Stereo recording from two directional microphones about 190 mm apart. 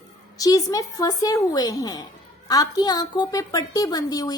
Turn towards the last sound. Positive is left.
turn(degrees=20)  # may be behind; listen again after turning